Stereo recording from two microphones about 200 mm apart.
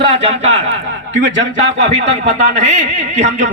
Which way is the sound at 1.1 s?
65° right (ahead or behind).